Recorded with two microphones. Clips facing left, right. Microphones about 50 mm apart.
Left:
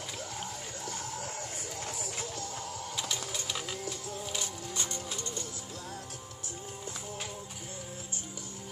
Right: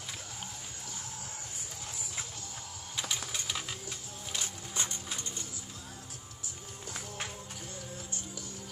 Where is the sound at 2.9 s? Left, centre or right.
Centre.